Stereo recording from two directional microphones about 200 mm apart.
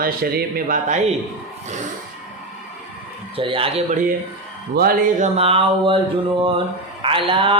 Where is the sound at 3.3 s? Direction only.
25° right (ahead or behind).